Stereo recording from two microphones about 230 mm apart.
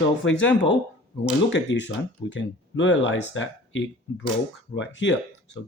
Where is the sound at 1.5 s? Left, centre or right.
Left.